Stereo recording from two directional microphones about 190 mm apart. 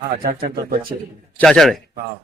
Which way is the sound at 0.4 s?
45° right (ahead or behind).